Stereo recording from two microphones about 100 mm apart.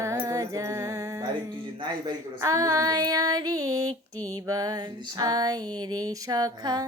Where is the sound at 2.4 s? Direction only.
35° right (ahead or behind).